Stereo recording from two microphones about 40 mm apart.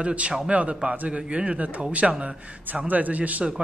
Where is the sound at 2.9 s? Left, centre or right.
Right.